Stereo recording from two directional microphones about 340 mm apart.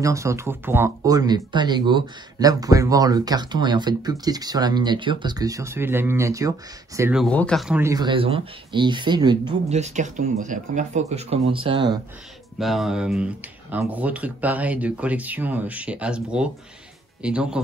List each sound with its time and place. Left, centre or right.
0.0 s speech: centre
12.5 s speech: centre